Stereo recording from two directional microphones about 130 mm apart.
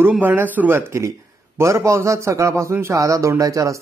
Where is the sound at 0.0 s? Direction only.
15° right (ahead or behind).